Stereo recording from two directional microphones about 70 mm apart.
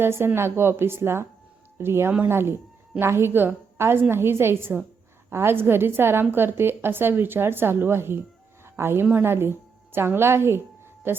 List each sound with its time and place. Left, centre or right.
0.0 s a woman's voice: right
8.6 s a sound: right
9.2 s a woman's voice: right